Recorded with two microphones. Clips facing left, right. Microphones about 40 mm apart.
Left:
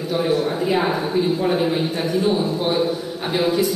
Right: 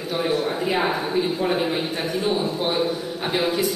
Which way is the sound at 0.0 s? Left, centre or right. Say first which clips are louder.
Left 3 dB; right.